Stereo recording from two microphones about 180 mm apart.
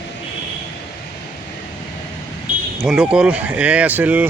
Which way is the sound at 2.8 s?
5° right (ahead or behind).